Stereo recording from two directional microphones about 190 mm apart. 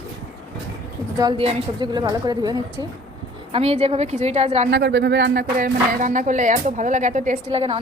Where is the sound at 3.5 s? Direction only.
30° right (ahead or behind).